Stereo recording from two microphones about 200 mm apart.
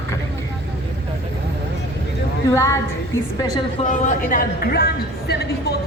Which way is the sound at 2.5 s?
15° left (ahead or behind).